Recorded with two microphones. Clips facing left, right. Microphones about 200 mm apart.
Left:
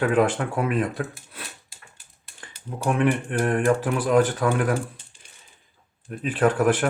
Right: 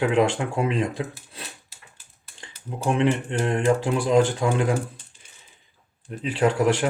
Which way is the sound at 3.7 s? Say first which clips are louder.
Even; 15° right (ahead or behind).